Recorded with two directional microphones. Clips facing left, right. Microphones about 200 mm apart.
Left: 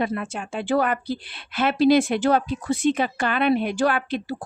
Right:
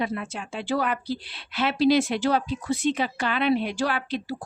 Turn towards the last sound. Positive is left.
turn(degrees=55)  # may be behind; listen again after turning